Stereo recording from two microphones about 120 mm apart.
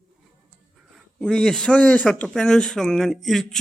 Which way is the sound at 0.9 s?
5° left (ahead or behind).